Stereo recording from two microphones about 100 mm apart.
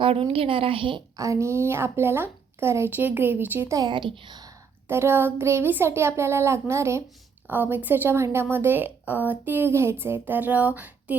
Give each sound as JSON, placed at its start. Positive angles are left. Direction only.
{"t": 0.0, "sound": "a woman's voice", "side_deg": -75}
{"t": 1.1, "sound": "a woman's voice", "side_deg": -35}
{"t": 3.8, "sound": "a woman's voice", "side_deg": -55}
{"t": 4.9, "sound": "a woman's voice", "side_deg": -25}